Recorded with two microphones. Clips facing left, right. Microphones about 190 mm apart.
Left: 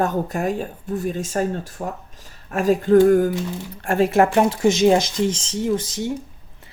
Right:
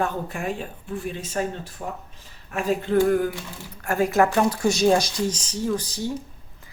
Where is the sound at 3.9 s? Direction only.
25° left (ahead or behind).